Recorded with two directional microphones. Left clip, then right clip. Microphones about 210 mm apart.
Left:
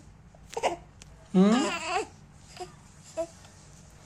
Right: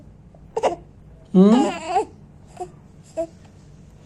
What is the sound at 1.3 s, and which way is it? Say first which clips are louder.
Sheep: right 8 dB; 10° left (ahead or behind).